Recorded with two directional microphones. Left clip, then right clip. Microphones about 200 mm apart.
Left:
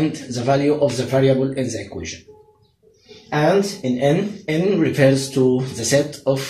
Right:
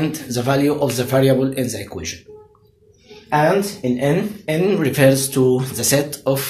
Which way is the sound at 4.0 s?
25° right (ahead or behind).